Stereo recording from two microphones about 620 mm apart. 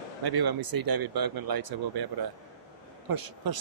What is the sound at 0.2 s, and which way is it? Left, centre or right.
Speech, right.